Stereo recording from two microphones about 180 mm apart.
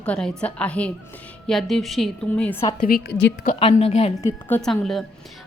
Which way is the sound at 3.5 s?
35° left (ahead or behind).